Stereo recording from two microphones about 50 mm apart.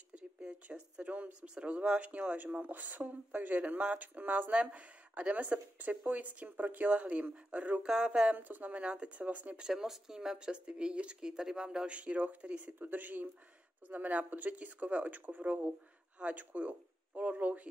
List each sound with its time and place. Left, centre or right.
0.1 s a sound: centre
0.7 s speech: right
7.8 s speech: centre
8.4 s speech: right
8.8 s speech: centre
9.2 s speech: right
9.6 s speech: centre
12.7 s speech: right
16.2 s speech: right